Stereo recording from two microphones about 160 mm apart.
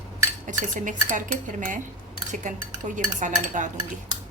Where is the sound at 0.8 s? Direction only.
55° right (ahead or behind).